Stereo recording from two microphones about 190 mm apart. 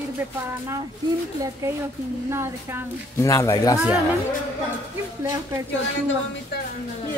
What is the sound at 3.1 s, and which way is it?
Speech, 15° left (ahead or behind).